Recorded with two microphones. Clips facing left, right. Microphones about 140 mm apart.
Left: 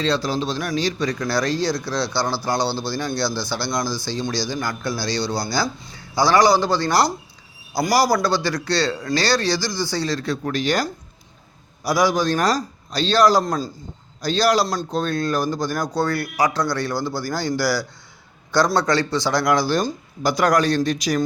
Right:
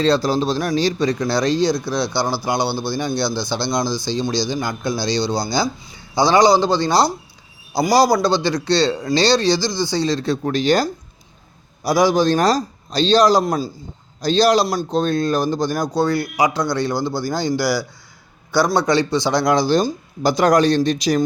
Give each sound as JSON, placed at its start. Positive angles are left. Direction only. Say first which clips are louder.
{"t": 0.0, "sound": "speech", "louder": "right 5 dB", "side_deg": -35}
{"t": 13.4, "sound": "a man's voice", "louder": "right 3 dB", "side_deg": -10}
{"t": 14.2, "sound": "a man's voice", "louder": "right 3 dB", "side_deg": -25}